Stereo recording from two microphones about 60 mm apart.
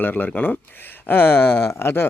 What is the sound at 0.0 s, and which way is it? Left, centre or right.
Speech, left.